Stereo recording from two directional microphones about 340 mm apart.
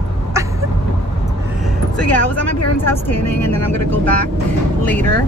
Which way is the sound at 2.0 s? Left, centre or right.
Left.